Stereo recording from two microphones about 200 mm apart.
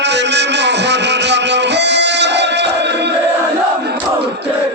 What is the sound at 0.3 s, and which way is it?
Music, 60° right (ahead or behind).